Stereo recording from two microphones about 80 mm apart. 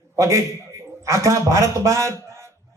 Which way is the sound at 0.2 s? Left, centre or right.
Right.